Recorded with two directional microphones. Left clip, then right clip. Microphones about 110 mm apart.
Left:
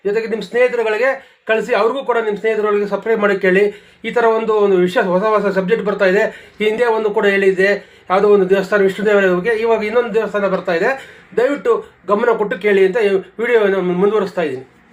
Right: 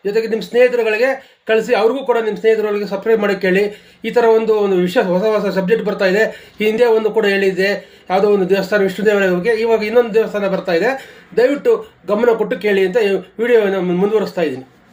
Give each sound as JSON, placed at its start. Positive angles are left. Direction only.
{"t": 0.3, "sound": "a man's voice", "side_deg": -25}